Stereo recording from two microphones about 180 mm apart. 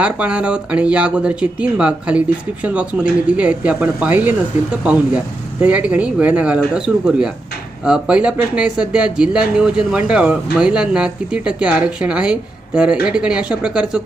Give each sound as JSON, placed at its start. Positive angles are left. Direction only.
{"t": 0.0, "sound": "speech", "side_deg": -5}